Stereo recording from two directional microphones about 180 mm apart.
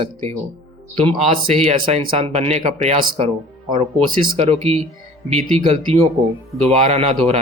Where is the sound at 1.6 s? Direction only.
30° right (ahead or behind).